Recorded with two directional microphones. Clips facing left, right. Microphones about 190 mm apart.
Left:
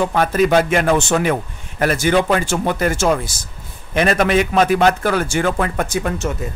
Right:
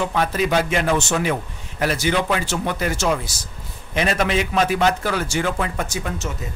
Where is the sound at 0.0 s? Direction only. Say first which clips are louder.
Left 5 dB; 50° left (ahead or behind).